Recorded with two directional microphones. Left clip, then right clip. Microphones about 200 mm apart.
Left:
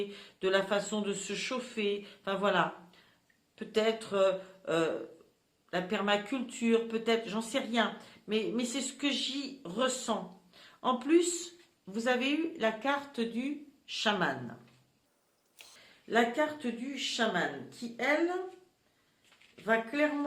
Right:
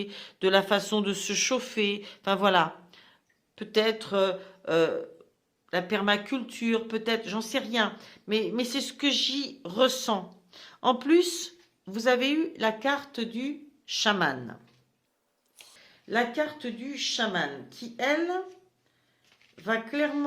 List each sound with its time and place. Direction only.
0.0 s speech: 40° right (ahead or behind)
16.0 s speech: 40° right (ahead or behind)
19.6 s speech: 45° right (ahead or behind)